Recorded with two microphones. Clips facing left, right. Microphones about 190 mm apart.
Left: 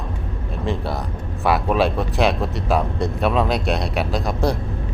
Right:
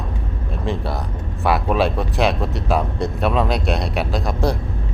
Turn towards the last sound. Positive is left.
turn(degrees=0)  # may be behind; listen again after turning